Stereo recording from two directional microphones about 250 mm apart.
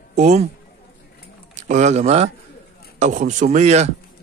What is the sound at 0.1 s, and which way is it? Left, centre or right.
Speech, right.